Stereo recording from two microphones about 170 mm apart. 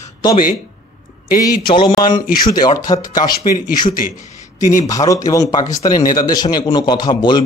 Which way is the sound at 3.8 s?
55° left (ahead or behind).